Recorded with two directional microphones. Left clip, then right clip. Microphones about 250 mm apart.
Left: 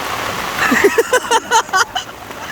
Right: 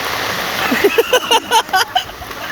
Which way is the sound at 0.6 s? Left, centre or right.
Centre.